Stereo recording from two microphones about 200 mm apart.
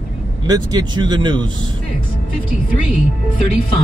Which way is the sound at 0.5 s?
20° right (ahead or behind).